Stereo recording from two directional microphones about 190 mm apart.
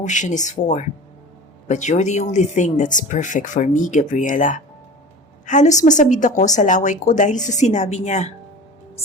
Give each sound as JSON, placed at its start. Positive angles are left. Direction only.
{"t": 0.0, "sound": "a woman's voice", "side_deg": 40}